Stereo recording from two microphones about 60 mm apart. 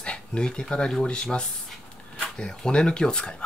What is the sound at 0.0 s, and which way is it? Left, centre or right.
Speech, centre.